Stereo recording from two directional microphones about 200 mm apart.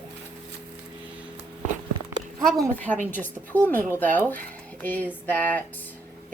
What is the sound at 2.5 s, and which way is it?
A woman's voice, 5° left (ahead or behind).